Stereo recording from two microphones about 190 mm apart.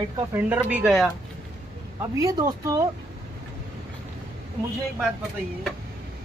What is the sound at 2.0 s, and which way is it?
Speech, 15° right (ahead or behind).